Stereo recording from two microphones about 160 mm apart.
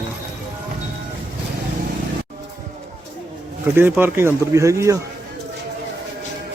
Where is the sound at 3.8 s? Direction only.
15° right (ahead or behind).